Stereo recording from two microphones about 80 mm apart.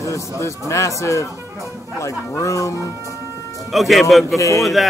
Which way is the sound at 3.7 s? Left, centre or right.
Centre.